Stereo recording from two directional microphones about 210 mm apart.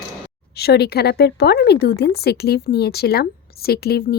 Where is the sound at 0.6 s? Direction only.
50° left (ahead or behind).